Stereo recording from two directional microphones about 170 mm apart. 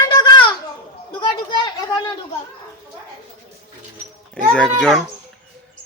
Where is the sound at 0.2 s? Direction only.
25° left (ahead or behind).